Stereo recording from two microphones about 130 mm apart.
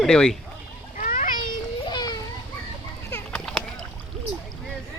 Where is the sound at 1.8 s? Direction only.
30° left (ahead or behind).